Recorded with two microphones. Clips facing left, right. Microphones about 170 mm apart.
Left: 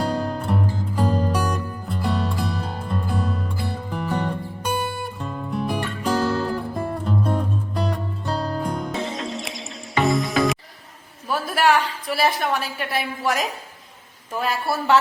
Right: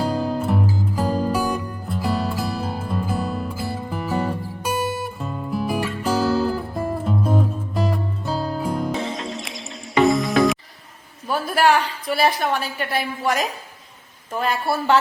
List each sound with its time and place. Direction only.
0.0 s music: 5° right (ahead or behind)
11.3 s a woman's voice: centre (ahead or behind)